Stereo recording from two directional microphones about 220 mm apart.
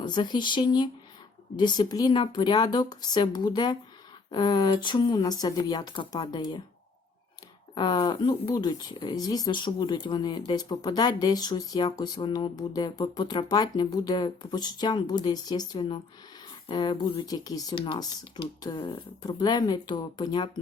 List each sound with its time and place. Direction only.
0.0 s speech: 20° left (ahead or behind)
7.8 s speech: 20° left (ahead or behind)